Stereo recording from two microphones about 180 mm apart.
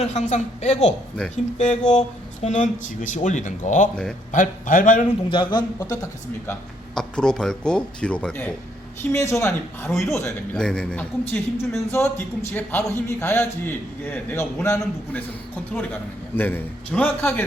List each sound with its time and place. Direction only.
0.0 s a woman's voice: 40° left (ahead or behind)
1.7 s speech: 5° left (ahead or behind)
2.4 s speech: 45° left (ahead or behind)
5.3 s speech: 25° left (ahead or behind)
6.5 s a man's voice: 5° left (ahead or behind)
10.5 s a man's voice: 5° left (ahead or behind)
16.3 s a man's voice: 10° left (ahead or behind)